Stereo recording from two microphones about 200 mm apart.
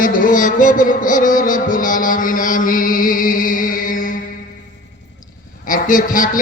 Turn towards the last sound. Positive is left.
turn(degrees=40)  # may be behind; listen again after turning